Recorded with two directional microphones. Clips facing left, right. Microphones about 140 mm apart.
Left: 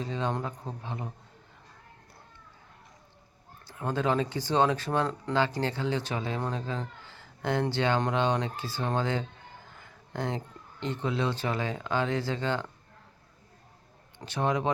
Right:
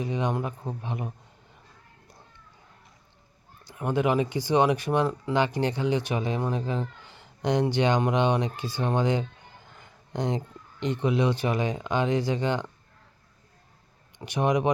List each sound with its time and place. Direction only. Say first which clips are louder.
0.0 s speech: right 3 dB; 15° right (ahead or behind)
3.6 s speech: right 4 dB; 15° right (ahead or behind)
14.2 s speech: right 4 dB; 15° right (ahead or behind)